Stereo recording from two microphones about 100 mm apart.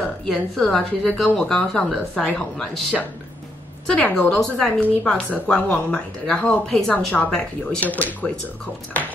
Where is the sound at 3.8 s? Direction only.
10° left (ahead or behind).